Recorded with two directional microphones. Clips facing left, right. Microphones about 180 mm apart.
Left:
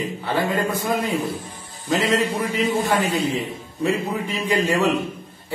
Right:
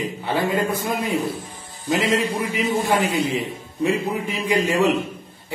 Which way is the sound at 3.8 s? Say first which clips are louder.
Right 1 dB; 15° right (ahead or behind).